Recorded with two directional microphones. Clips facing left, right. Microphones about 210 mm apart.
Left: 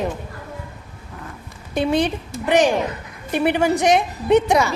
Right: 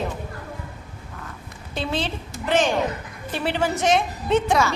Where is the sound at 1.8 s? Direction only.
15° left (ahead or behind).